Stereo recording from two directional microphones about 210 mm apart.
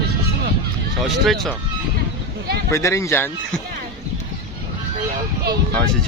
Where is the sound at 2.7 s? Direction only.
15° left (ahead or behind).